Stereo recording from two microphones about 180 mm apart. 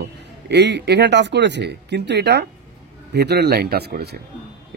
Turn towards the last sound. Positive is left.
turn(degrees=-65)  # may be behind; listen again after turning